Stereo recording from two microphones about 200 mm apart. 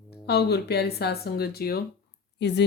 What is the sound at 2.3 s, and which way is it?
Speech, 60° left (ahead or behind).